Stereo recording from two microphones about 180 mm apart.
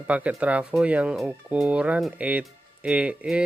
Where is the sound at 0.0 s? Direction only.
5° right (ahead or behind).